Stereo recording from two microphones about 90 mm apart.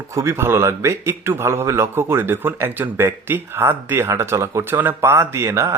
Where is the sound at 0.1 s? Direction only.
30° right (ahead or behind).